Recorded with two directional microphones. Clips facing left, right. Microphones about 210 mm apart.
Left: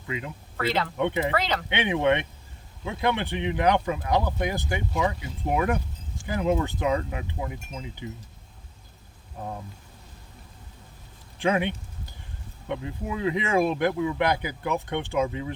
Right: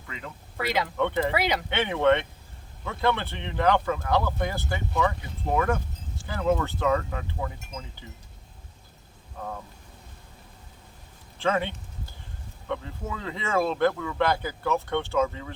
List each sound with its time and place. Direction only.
0.1 s speech: 15° left (ahead or behind)
0.5 s speech: 15° right (ahead or behind)
0.9 s speech: 15° left (ahead or behind)
1.3 s speech: 10° right (ahead or behind)
1.7 s speech: 15° left (ahead or behind)
11.3 s speech: 15° left (ahead or behind)